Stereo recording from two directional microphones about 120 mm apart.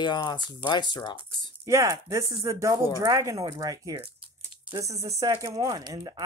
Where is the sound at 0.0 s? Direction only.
40° left (ahead or behind).